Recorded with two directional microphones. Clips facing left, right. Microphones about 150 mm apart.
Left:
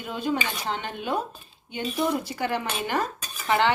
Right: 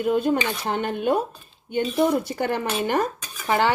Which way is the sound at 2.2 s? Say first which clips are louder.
Right 3 dB; 50° right (ahead or behind).